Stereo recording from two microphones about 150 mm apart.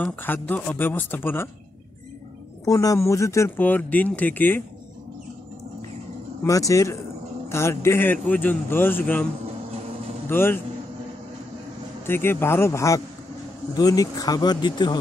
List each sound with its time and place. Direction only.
0.0 s speech: 10° left (ahead or behind)
2.6 s speech: 25° left (ahead or behind)
6.4 s speech: 20° left (ahead or behind)
10.3 s speech: 15° left (ahead or behind)
12.1 s speech: 15° left (ahead or behind)